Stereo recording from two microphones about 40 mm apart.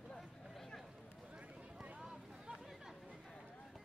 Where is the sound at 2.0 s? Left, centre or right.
Centre.